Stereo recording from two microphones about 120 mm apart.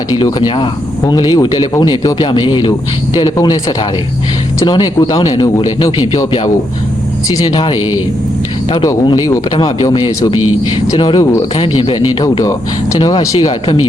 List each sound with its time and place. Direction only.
0.3 s speech: 40° left (ahead or behind)
7.3 s a man's voice: 35° left (ahead or behind)
11.5 s speech: 50° left (ahead or behind)
13.0 s speech: 35° left (ahead or behind)